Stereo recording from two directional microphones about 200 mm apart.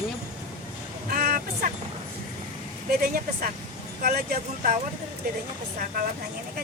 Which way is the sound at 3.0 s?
50° right (ahead or behind).